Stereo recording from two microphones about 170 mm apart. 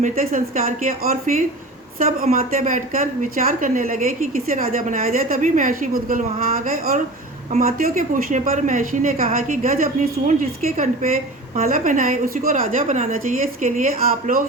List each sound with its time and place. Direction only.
0.0 s a woman's voice: 50° right (ahead or behind)
7.6 s a woman's voice: 55° right (ahead or behind)